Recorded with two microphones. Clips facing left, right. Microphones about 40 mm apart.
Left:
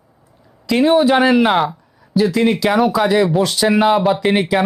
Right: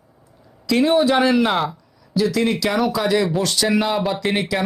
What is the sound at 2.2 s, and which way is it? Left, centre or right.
Speech, left.